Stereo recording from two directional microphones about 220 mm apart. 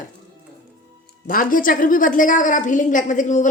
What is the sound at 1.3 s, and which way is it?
A woman's voice, 40° left (ahead or behind).